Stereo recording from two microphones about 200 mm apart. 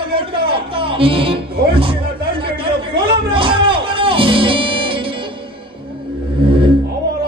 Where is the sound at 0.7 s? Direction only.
25° right (ahead or behind).